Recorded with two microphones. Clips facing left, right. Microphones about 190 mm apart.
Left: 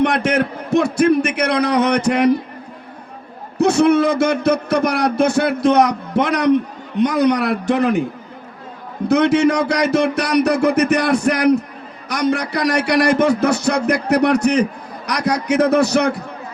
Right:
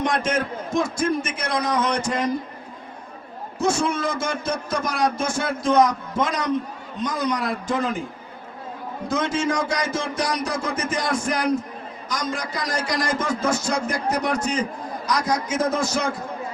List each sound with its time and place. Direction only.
0.0 s a sound: 65° left (ahead or behind)
3.6 s a man's voice: 65° left (ahead or behind)
9.0 s a man's voice: 65° left (ahead or behind)